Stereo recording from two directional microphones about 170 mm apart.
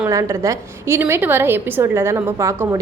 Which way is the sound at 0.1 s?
20° right (ahead or behind).